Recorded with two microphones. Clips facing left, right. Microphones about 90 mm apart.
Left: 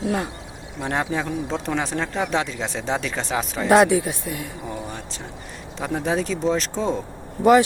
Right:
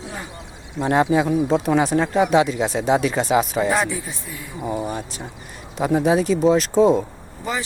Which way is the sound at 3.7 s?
65° left (ahead or behind).